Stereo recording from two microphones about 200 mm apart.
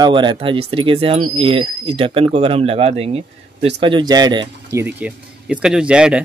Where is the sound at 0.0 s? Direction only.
25° right (ahead or behind).